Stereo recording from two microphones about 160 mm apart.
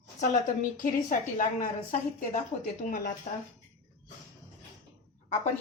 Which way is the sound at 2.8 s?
60° left (ahead or behind).